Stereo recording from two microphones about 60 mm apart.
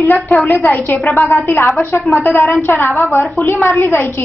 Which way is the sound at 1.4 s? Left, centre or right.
Left.